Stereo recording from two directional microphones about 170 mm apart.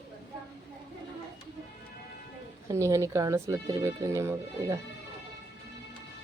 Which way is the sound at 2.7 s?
15° right (ahead or behind).